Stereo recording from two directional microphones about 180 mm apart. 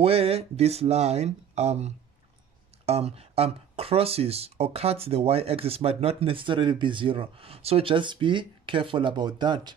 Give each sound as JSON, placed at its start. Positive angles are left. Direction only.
{"t": 0.0, "sound": "speech", "side_deg": -30}